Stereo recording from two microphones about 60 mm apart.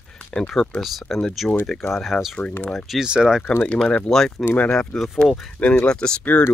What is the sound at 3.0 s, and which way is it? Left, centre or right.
Speech, centre.